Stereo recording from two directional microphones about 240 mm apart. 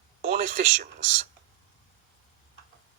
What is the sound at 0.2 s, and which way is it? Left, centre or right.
Speech, right.